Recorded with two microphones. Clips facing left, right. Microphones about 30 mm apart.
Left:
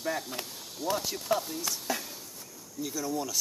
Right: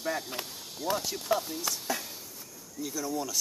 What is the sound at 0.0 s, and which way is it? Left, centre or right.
A man's voice, centre.